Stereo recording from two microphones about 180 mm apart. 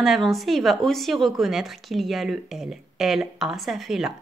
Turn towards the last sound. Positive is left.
turn(degrees=0)  # may be behind; listen again after turning